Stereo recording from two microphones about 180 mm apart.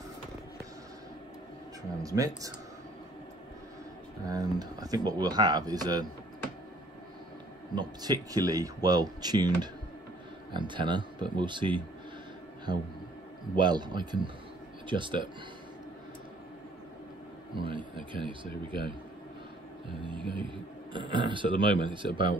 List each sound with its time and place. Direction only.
1.8 s speech: 20° right (ahead or behind)
4.3 s speech: 20° right (ahead or behind)
7.7 s speech: 25° right (ahead or behind)
13.6 s speech: 25° right (ahead or behind)
17.6 s speech: 30° right (ahead or behind)
19.9 s speech: 30° right (ahead or behind)